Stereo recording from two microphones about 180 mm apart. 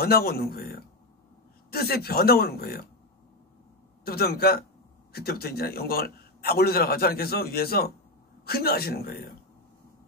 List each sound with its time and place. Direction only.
0.0 s a man's voice: 60° left (ahead or behind)
4.0 s a man's voice: 60° left (ahead or behind)